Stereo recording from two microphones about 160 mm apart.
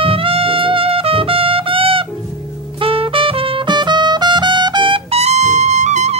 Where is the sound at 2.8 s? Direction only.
35° right (ahead or behind).